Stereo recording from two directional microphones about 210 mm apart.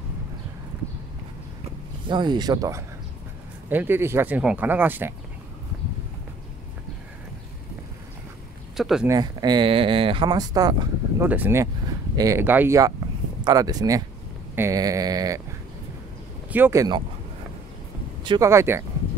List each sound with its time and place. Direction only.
2.0 s speech: 20° right (ahead or behind)
8.7 s a sound: centre (ahead or behind)
9.0 s speech: 20° right (ahead or behind)
14.5 s sheep: 15° right (ahead or behind)
16.4 s speech: 10° right (ahead or behind)
18.2 s speech: 20° right (ahead or behind)